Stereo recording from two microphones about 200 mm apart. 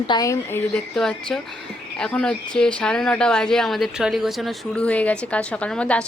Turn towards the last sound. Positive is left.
turn(degrees=5)  # may be behind; listen again after turning